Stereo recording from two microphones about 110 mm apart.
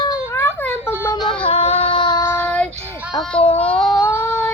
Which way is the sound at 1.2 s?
60° left (ahead or behind).